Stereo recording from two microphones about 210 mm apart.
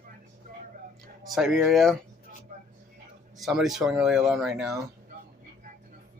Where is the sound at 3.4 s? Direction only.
Centre (ahead or behind).